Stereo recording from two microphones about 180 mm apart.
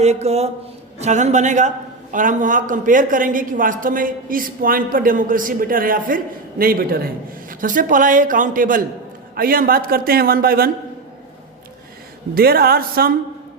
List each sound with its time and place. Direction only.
0.0 s a man's voice: 40° right (ahead or behind); by 10.7 s 55° right (ahead or behind)
12.3 s a man's voice: 55° right (ahead or behind)